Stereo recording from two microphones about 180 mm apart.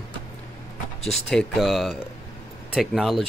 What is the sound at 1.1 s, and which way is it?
Speech, centre (ahead or behind).